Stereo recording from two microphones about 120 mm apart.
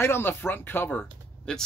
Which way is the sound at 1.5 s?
5° left (ahead or behind).